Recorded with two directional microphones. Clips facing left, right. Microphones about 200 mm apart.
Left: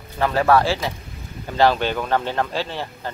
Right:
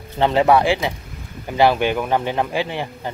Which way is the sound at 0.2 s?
20° right (ahead or behind).